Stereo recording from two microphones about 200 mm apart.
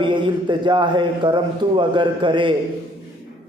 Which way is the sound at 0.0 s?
25° right (ahead or behind).